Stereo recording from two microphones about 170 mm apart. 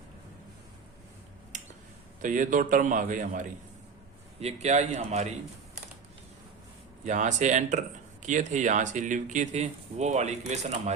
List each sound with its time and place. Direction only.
2.2 s speech: 50° right (ahead or behind)
4.4 s a man's voice: 40° right (ahead or behind)
7.0 s speech: 45° right (ahead or behind)